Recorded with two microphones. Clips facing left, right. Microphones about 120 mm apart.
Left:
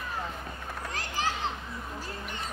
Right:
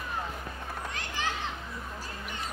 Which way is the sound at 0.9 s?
35° left (ahead or behind).